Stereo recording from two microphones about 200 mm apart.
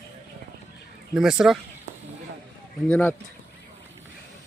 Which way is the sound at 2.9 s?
5° left (ahead or behind).